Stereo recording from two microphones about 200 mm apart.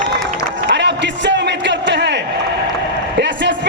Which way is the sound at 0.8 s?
60° right (ahead or behind).